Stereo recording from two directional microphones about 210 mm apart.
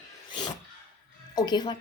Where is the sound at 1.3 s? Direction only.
20° left (ahead or behind).